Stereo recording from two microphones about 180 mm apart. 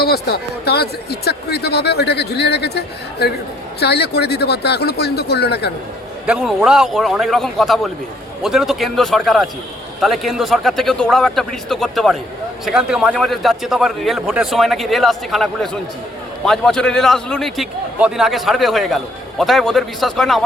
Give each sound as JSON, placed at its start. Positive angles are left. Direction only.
{"t": 0.0, "sound": "speech", "side_deg": 60}
{"t": 6.2, "sound": "a man's voice", "side_deg": -5}